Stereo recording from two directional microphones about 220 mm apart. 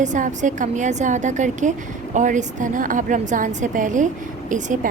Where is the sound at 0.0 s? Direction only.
35° right (ahead or behind).